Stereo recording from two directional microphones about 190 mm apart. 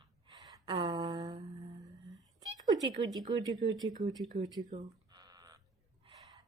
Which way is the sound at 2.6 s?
20° right (ahead or behind).